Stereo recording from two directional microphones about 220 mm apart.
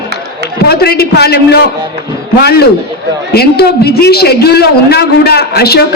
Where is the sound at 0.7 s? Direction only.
45° left (ahead or behind).